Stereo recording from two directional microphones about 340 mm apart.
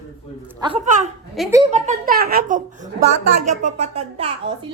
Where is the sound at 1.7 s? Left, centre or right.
Right.